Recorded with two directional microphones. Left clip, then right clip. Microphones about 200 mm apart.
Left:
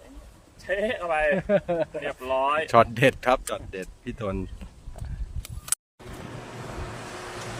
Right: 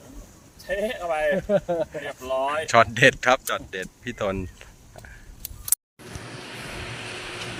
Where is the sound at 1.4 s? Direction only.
25° right (ahead or behind).